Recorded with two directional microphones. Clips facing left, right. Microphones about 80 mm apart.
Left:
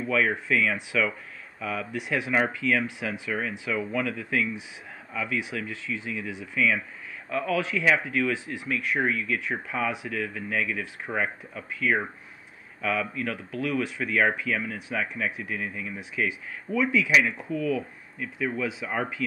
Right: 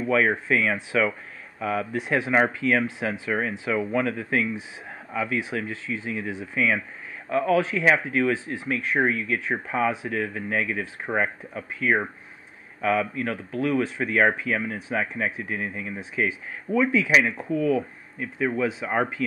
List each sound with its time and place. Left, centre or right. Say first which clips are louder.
0.1 s speech: right 3 dB; right
13.1 s speech: right 3 dB; right